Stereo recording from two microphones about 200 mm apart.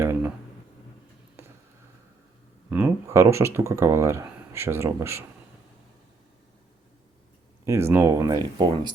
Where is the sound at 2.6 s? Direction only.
10° right (ahead or behind).